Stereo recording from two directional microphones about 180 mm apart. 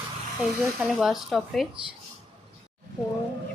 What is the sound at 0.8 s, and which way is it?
Speech, centre (ahead or behind).